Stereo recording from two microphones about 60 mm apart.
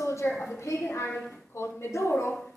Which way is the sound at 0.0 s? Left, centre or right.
Left.